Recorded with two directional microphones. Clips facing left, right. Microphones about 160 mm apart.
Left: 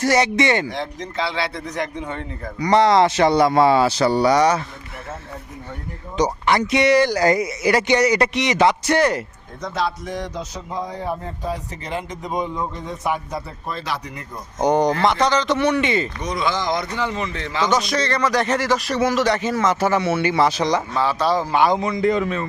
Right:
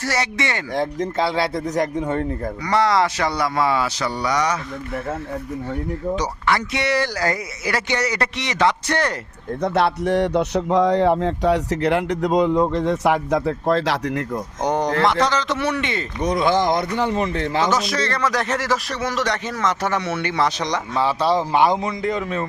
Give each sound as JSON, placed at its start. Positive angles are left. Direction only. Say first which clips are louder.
{"t": 0.0, "sound": "speech", "louder": "left 6 dB", "side_deg": 20}
{"t": 0.8, "sound": "speech", "louder": "right 5 dB", "side_deg": -50}
{"t": 2.6, "sound": "speech", "louder": "left 4 dB", "side_deg": 20}
{"t": 6.1, "sound": "speech", "louder": "left 7 dB", "side_deg": 20}
{"t": 9.6, "sound": "speech", "louder": "right 5 dB", "side_deg": -60}
{"t": 14.6, "sound": "speech", "louder": "left 3 dB", "side_deg": 0}
{"t": 16.2, "sound": "speech", "louder": "right 5 dB", "side_deg": -55}
{"t": 17.7, "sound": "speech", "louder": "left 1 dB", "side_deg": 0}
{"t": 21.0, "sound": "speech", "louder": "right 4 dB", "side_deg": -25}